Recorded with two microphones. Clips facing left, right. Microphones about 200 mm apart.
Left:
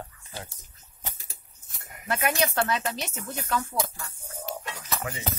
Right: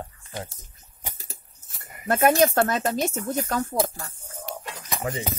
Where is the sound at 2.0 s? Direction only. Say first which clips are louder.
Right 8 dB; 45° right (ahead or behind).